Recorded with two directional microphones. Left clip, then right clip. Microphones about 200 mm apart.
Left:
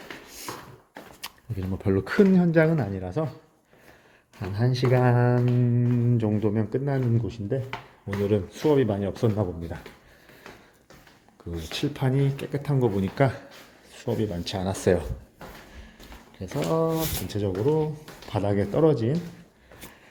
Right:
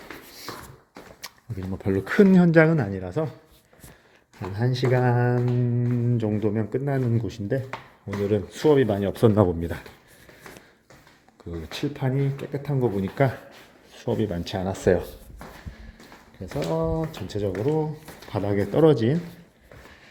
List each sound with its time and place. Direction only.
1.2 s speech: centre (ahead or behind)
2.3 s speech: 20° right (ahead or behind)
4.4 s speech: centre (ahead or behind)
9.2 s speech: 30° right (ahead or behind)
11.7 s speech: centre (ahead or behind)
16.6 s speech: centre (ahead or behind); by 19.1 s 20° right (ahead or behind)